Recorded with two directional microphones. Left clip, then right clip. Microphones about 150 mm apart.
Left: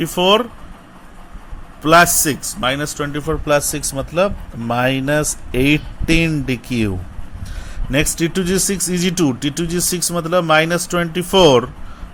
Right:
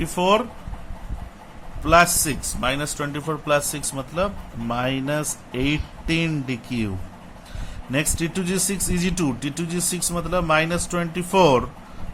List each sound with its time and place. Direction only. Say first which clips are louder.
0.0 s speech: left 5 dB; 25° left (ahead or behind)
1.8 s speech: left 5 dB; 35° left (ahead or behind)